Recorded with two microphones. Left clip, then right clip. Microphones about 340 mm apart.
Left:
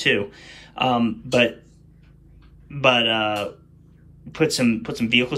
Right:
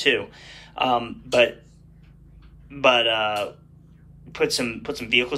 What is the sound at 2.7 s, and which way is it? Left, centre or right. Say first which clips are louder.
Speech: even; centre.